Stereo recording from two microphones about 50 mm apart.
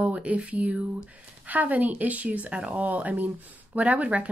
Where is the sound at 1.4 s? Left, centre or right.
Right.